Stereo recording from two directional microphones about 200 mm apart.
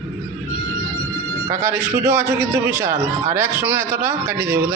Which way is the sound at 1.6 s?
10° right (ahead or behind).